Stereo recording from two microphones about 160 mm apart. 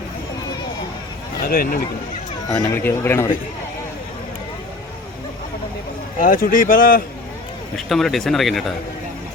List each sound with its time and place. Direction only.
1.5 s speech: 70° left (ahead or behind)
2.5 s speech: 15° left (ahead or behind)
6.1 s a man's voice: 55° left (ahead or behind)
7.9 s speech: centre (ahead or behind)